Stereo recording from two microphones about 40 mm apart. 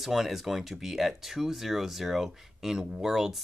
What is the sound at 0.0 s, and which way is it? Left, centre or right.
Speech, centre.